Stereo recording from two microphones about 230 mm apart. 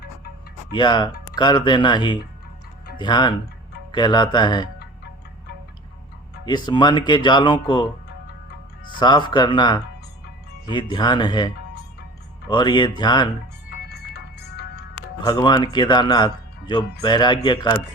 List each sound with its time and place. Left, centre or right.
0.7 s speech: centre
6.4 s speech: centre
9.0 s speech: centre
13.7 s music: left
15.2 s speech: centre